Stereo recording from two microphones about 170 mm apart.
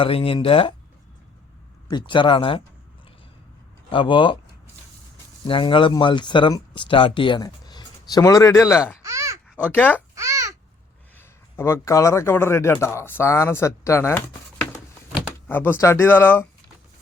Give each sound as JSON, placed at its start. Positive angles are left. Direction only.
{"t": 0.0, "sound": "speech", "side_deg": 35}
{"t": 1.9, "sound": "speech", "side_deg": 25}
{"t": 3.8, "sound": "speech", "side_deg": 30}
{"t": 5.5, "sound": "speech", "side_deg": 30}
{"t": 9.0, "sound": "babbling", "side_deg": -20}
{"t": 9.7, "sound": "speech", "side_deg": 10}
{"t": 10.2, "sound": "babbling", "side_deg": -20}
{"t": 11.2, "sound": "a man's voice", "side_deg": 15}